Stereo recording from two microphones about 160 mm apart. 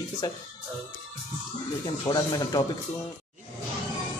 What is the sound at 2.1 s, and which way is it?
Speech, 25° left (ahead or behind).